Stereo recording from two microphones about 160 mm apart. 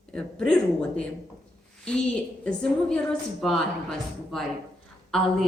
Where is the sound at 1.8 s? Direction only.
5° left (ahead or behind).